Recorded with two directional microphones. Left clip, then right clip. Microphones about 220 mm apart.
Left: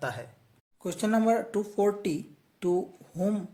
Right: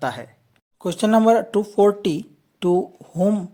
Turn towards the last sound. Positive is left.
turn(degrees=-30)  # may be behind; listen again after turning